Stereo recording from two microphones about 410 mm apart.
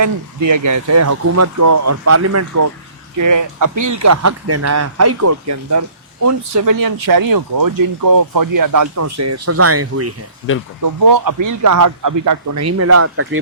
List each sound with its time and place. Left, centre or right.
0.0 s speech: right
10.8 s speech: right